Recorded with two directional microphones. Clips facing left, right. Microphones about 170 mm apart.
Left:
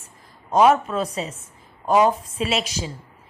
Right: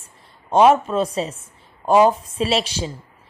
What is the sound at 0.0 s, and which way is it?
Speech, 30° right (ahead or behind).